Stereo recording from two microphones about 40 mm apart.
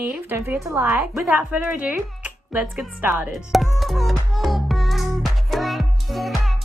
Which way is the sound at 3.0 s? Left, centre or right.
Right.